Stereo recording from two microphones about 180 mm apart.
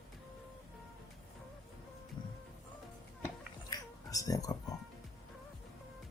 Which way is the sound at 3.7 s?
20° left (ahead or behind).